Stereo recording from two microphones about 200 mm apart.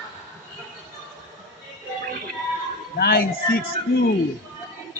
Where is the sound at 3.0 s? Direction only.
50° left (ahead or behind).